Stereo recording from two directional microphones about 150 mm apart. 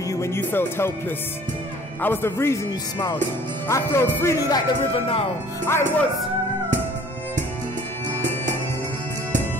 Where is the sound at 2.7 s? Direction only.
25° left (ahead or behind).